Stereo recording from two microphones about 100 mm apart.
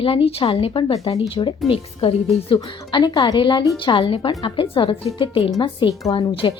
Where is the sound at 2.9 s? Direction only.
45° left (ahead or behind).